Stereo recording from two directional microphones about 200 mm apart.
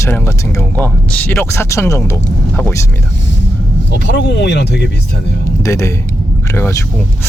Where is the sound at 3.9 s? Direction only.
60° left (ahead or behind).